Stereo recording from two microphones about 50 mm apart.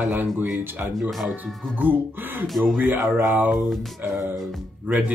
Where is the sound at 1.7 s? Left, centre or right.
Right.